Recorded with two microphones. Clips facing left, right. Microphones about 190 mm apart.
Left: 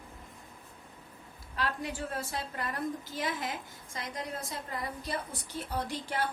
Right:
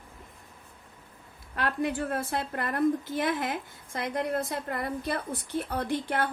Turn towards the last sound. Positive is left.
turn(degrees=-60)  # may be behind; listen again after turning